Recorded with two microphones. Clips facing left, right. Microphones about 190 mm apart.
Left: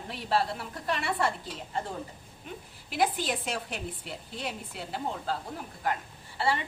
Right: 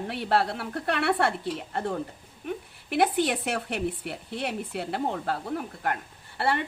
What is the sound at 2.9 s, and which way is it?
A woman's voice, 65° right (ahead or behind).